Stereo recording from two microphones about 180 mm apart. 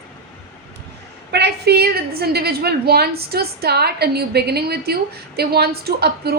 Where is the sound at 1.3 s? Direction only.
65° right (ahead or behind).